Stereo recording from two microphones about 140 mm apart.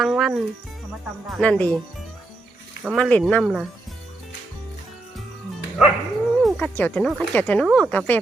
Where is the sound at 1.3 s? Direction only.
5° left (ahead or behind).